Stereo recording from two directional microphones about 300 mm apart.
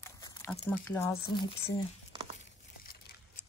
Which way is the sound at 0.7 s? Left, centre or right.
Centre.